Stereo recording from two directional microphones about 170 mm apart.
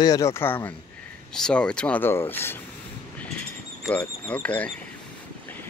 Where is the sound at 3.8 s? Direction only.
5° left (ahead or behind).